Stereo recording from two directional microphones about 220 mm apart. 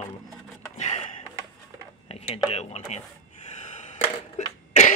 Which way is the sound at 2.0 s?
25° left (ahead or behind).